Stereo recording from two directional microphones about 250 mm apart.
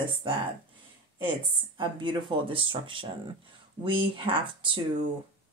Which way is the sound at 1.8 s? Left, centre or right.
Centre.